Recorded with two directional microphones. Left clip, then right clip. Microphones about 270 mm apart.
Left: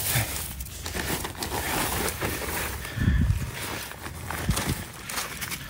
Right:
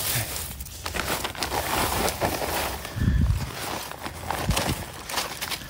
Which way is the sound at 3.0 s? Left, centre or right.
Centre.